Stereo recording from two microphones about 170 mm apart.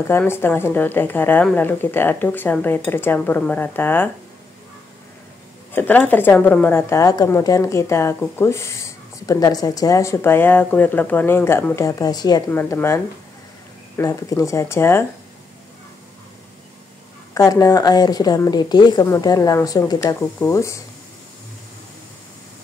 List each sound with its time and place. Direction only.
0.1 s speech: 15° left (ahead or behind)
5.7 s speech: 10° left (ahead or behind)
12.4 s speech: 10° left (ahead or behind)
17.3 s a woman's voice: 20° left (ahead or behind)